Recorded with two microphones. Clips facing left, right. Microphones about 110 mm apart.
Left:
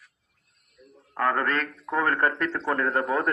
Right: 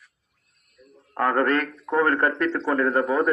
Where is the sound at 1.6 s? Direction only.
Centre (ahead or behind).